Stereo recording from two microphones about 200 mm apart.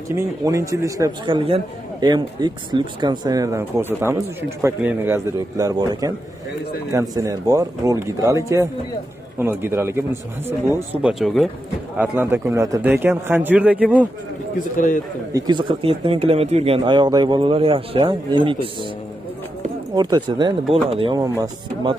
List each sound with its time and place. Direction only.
0.1 s a man's voice: 15° right (ahead or behind)
12.9 s a man's voice: 5° right (ahead or behind)
15.3 s speech: 20° right (ahead or behind)
20.0 s speech: 20° right (ahead or behind)